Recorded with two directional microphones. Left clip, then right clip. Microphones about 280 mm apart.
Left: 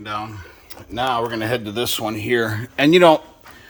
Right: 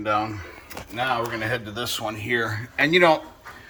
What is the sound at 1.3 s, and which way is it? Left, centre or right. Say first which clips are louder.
Speech: left 4 dB; left.